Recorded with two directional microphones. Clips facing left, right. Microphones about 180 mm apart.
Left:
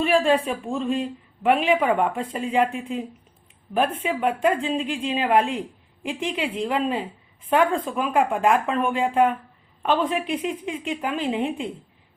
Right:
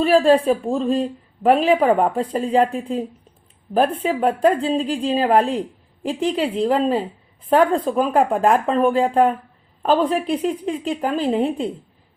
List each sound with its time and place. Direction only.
0.0 s speech: 35° right (ahead or behind)